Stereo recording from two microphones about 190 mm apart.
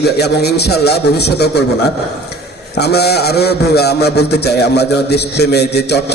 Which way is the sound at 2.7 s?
60° left (ahead or behind).